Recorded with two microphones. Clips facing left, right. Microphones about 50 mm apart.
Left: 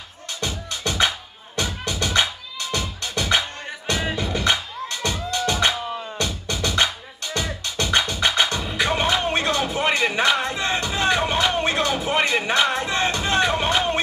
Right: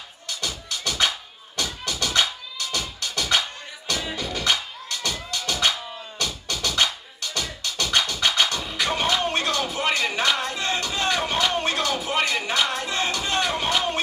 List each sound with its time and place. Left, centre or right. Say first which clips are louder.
0.3 s music: left 2 dB; left